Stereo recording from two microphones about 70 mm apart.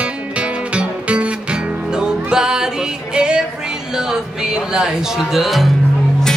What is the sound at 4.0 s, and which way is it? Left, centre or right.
Speech, centre.